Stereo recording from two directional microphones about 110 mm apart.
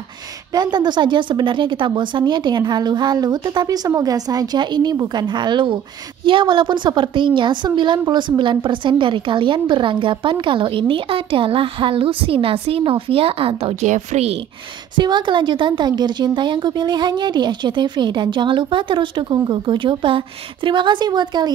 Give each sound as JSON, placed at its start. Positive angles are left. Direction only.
{"t": 0.5, "sound": "a woman's voice", "side_deg": -40}
{"t": 15.0, "sound": "a woman's voice", "side_deg": -45}